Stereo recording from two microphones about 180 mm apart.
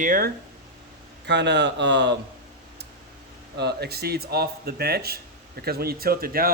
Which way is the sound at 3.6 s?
65° right (ahead or behind).